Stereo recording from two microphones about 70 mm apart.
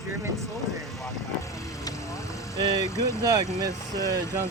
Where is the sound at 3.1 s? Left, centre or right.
Left.